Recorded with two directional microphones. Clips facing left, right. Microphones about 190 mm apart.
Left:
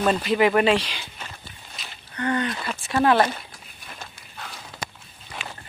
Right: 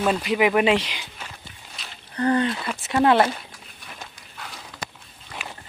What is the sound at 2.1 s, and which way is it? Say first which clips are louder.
Speech: right 4 dB; 30° right (ahead or behind).